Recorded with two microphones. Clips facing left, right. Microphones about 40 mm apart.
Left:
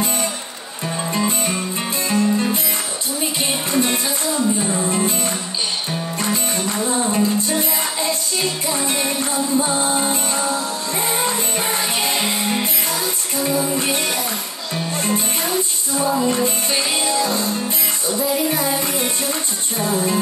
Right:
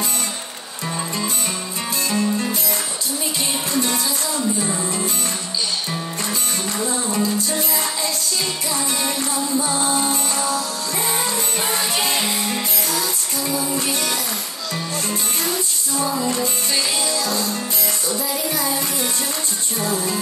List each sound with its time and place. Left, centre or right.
7.1 s music: left
18.5 s music: left